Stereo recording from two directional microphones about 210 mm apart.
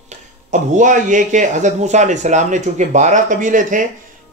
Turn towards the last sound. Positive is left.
turn(degrees=-35)  # may be behind; listen again after turning